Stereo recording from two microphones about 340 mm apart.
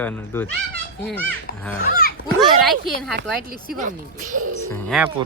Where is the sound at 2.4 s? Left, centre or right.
Centre.